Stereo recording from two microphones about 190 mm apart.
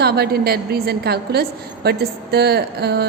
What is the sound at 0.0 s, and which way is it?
A woman's voice, 55° right (ahead or behind).